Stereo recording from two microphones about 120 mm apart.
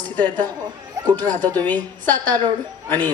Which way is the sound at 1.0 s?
25° right (ahead or behind).